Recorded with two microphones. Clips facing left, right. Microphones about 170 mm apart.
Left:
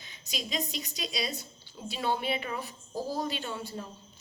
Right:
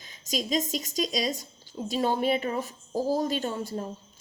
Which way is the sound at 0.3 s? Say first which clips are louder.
Right 7 dB; 40° right (ahead or behind).